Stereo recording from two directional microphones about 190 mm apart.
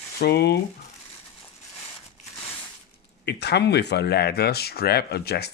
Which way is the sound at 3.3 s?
60° left (ahead or behind).